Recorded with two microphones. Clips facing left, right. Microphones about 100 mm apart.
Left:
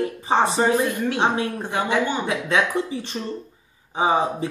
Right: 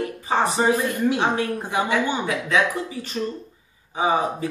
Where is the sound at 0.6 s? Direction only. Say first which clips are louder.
Left 1 dB; 10° right (ahead or behind).